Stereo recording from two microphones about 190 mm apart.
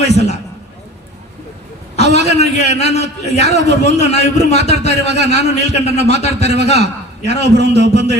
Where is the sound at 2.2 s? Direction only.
35° left (ahead or behind).